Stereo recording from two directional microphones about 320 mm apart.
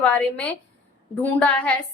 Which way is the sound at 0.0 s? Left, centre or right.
Centre.